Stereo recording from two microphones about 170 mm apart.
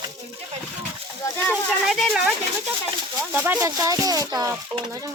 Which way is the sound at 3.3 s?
10° right (ahead or behind).